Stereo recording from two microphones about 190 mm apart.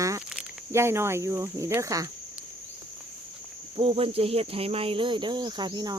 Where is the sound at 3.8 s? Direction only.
30° right (ahead or behind).